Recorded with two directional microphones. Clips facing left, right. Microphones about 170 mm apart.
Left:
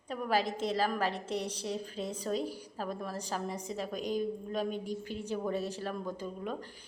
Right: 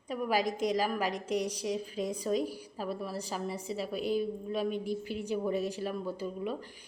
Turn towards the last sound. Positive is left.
turn(degrees=-10)  # may be behind; listen again after turning